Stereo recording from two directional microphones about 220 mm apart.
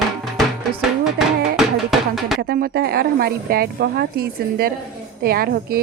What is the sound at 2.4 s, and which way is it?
Speech, 45° right (ahead or behind).